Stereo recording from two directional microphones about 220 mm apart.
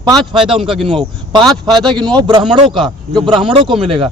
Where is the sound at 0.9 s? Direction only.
25° right (ahead or behind).